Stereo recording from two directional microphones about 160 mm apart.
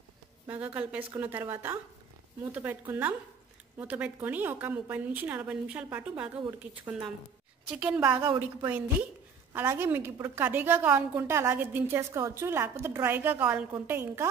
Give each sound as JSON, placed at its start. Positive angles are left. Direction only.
{"t": 0.5, "sound": "a woman's voice", "side_deg": -10}